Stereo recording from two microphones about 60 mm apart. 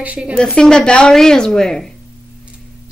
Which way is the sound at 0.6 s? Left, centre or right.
Centre.